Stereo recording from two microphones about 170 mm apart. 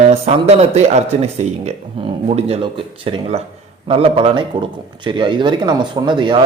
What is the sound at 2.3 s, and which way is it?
A man's voice, 40° right (ahead or behind).